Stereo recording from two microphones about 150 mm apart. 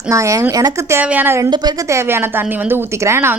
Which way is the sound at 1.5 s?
25° right (ahead or behind).